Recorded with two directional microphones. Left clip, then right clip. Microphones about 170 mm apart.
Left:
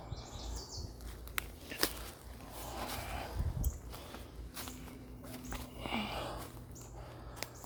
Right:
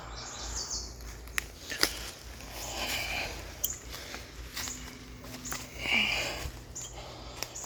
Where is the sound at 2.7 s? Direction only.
10° right (ahead or behind).